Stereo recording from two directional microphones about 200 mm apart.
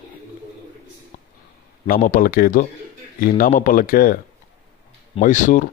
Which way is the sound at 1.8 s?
45° left (ahead or behind).